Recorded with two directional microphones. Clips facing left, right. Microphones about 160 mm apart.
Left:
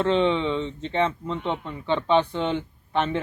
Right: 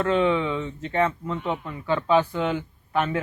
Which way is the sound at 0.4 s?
25° left (ahead or behind).